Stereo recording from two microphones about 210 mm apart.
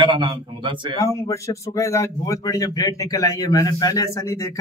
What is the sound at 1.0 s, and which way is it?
Speech, 15° left (ahead or behind).